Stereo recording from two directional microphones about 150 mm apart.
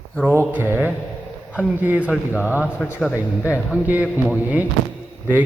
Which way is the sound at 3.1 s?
15° left (ahead or behind).